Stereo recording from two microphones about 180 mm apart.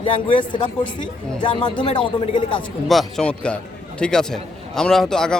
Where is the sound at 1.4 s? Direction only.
25° left (ahead or behind).